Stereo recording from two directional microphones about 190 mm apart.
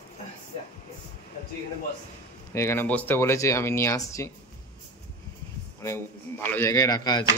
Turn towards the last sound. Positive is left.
turn(degrees=20)  # may be behind; listen again after turning